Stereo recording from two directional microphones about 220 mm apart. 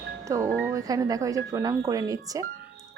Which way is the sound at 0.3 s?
15° right (ahead or behind).